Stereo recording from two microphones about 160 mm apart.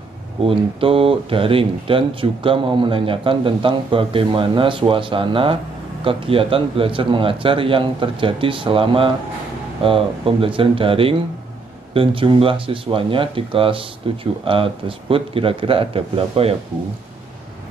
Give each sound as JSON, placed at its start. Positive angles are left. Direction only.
{"t": 0.5, "sound": "speech", "side_deg": -35}